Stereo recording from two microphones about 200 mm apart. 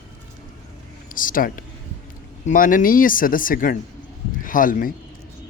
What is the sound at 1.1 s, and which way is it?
Speech, 45° left (ahead or behind).